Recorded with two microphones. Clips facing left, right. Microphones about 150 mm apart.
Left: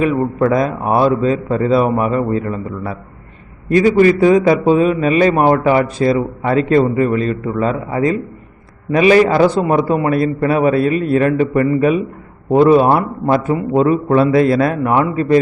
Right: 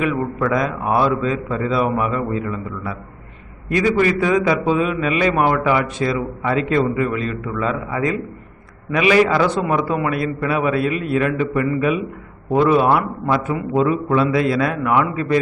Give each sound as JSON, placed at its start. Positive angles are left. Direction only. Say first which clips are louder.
{"t": 0.4, "sound": "a man's voice", "louder": "left 4 dB", "side_deg": 35}
{"t": 3.7, "sound": "a man's voice", "louder": "left 6 dB", "side_deg": 30}